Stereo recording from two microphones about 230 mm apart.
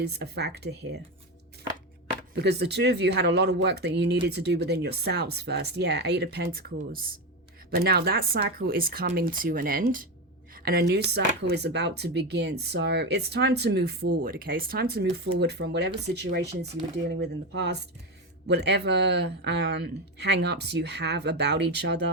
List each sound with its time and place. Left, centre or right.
0.0 s speech: right
2.3 s speech: right